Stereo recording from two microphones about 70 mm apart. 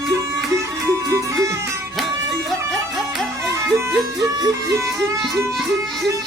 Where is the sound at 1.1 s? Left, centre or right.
Right.